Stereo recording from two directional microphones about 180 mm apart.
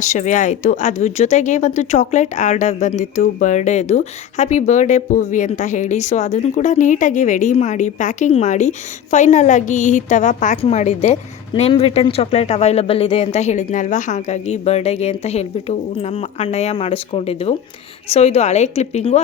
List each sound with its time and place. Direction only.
0.0 s speech: 40° left (ahead or behind)